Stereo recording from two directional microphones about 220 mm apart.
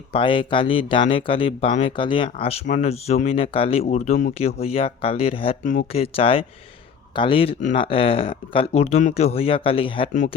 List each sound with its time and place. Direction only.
0.1 s speech: 25° left (ahead or behind)
10.1 s speech: 35° left (ahead or behind)